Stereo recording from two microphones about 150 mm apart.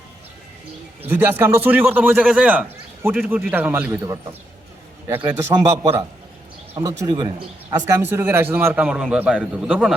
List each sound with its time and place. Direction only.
1.0 s a man's voice: 15° right (ahead or behind)
5.0 s a man's voice: 15° right (ahead or behind); by 7.4 s 35° right (ahead or behind)
7.8 s a man's voice: 20° right (ahead or behind)